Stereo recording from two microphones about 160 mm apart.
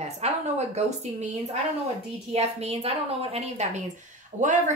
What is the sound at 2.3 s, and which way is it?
A woman's voice, 40° right (ahead or behind).